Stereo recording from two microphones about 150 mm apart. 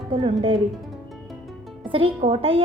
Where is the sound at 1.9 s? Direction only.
45° right (ahead or behind).